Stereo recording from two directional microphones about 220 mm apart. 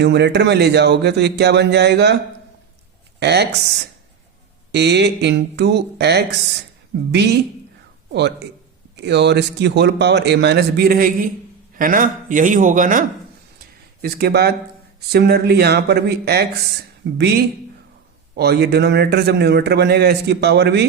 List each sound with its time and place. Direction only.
0.0 s a man's voice: 50° right (ahead or behind)
3.2 s speech: 50° right (ahead or behind)
4.7 s a man's voice: 50° right (ahead or behind)
9.0 s a man's voice: 50° right (ahead or behind)